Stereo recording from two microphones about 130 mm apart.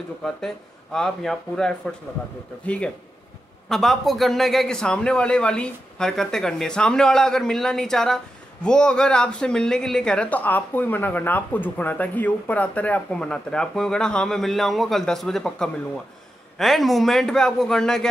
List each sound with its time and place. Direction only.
0.9 s a man's voice: 5° left (ahead or behind)